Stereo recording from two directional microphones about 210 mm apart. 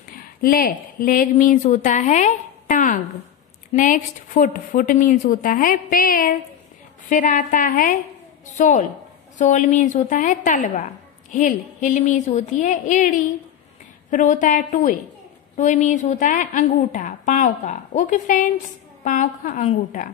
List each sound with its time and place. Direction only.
0.2 s a woman's voice: 45° left (ahead or behind)